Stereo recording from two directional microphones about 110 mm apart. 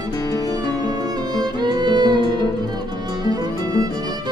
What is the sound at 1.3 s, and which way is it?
Music, 40° right (ahead or behind).